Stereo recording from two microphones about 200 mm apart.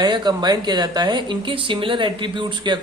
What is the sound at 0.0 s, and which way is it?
A man's voice, 20° right (ahead or behind).